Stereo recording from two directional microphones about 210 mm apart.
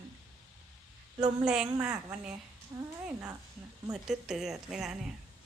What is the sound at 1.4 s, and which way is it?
A woman's voice, 5° right (ahead or behind).